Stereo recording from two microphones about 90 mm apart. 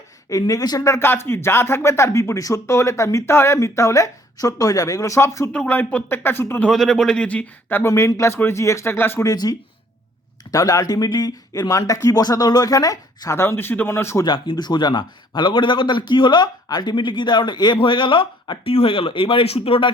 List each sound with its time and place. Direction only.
0.3 s speech: 40° left (ahead or behind)
0.9 s speech: 25° left (ahead or behind)
5.5 s speech: 15° left (ahead or behind)
6.7 s speech: 5° left (ahead or behind); by 9.2 s 25° left (ahead or behind)
9.2 s speech: 45° left (ahead or behind); by 14.3 s 30° left (ahead or behind)
14.3 s a man's voice: 60° left (ahead or behind); by 19.9 s 90° left